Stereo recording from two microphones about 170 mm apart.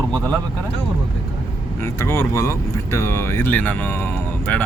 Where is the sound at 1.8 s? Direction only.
15° left (ahead or behind).